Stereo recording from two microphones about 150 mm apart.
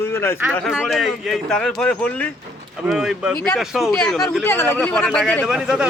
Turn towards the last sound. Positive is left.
turn(degrees=-5)  # may be behind; listen again after turning